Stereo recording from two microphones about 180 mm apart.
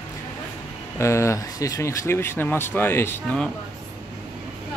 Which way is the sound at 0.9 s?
15° left (ahead or behind).